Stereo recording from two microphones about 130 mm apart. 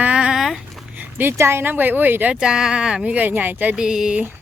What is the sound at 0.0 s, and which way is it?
Speech, 10° right (ahead or behind).